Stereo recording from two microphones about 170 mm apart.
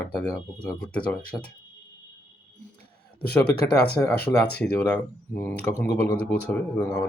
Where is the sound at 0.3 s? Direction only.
10° left (ahead or behind).